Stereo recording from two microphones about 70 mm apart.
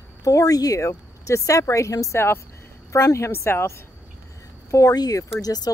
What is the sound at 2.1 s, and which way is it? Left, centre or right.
Speech, left.